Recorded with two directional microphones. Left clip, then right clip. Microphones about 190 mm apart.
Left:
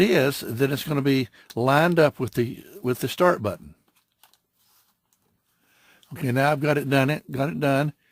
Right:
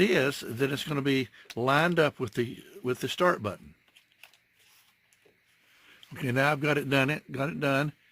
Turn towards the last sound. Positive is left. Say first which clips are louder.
# left 5 dB
turn(degrees=50)  # may be behind; listen again after turning